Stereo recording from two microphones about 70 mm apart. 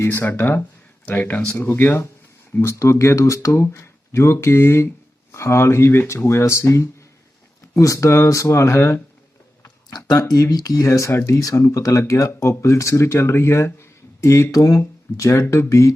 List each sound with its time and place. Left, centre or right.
0.0 s speech: left
9.9 s speech: left
11.1 s speech: left
11.3 s speech: left